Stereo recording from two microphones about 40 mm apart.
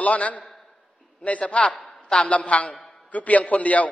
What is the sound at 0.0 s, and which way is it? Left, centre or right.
A man's voice, left.